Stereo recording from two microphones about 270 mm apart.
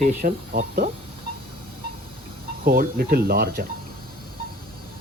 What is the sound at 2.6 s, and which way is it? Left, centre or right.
Speech, right.